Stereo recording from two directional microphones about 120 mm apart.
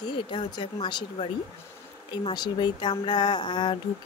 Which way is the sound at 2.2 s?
35° left (ahead or behind).